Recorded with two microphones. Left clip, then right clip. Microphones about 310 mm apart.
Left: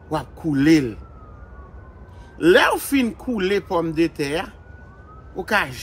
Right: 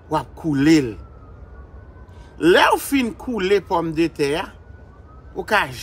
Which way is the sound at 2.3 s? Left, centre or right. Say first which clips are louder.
Right 1 dB; centre.